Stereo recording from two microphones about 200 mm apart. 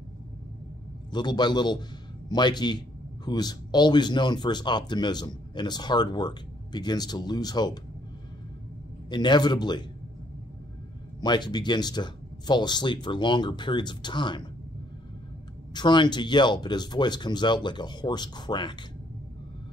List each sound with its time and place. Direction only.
1.1 s speech: 20° left (ahead or behind)
9.1 s speech: 20° left (ahead or behind)
11.1 s speech: 20° left (ahead or behind)
15.7 s speech: 20° left (ahead or behind)